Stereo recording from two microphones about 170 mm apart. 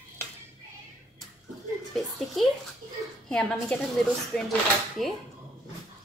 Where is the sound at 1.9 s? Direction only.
5° left (ahead or behind).